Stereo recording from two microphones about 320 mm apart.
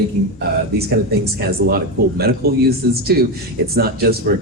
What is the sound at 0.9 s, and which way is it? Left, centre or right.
Speech, right.